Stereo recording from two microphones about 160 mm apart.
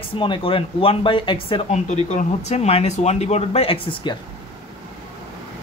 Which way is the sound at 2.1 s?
45° left (ahead or behind).